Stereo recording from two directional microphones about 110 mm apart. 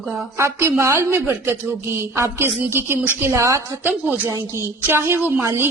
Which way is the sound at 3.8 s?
15° right (ahead or behind).